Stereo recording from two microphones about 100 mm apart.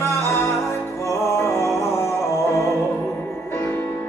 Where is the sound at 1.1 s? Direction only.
25° left (ahead or behind).